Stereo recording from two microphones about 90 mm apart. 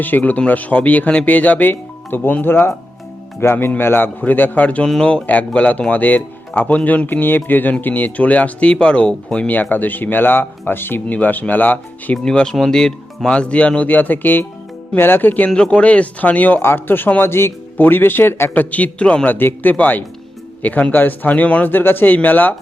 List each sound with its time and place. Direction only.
0.0 s speech: 20° left (ahead or behind)